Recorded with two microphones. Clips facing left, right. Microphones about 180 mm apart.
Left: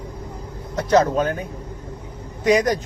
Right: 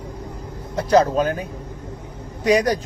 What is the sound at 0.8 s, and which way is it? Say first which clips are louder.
Speech: right 1 dB; 35° right (ahead or behind).